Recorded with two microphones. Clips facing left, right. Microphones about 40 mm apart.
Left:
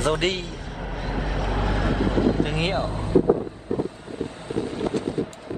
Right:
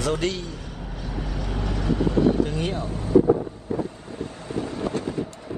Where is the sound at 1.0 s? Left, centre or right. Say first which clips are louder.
Left 4 dB; left.